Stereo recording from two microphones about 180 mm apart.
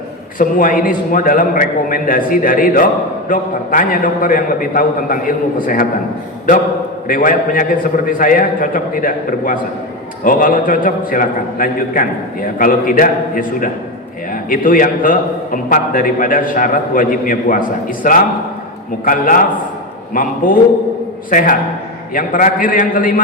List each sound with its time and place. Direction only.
0.3 s a man's voice: 50° left (ahead or behind)
7.1 s a man's voice: 50° left (ahead or behind)
19.0 s a man's voice: 50° left (ahead or behind)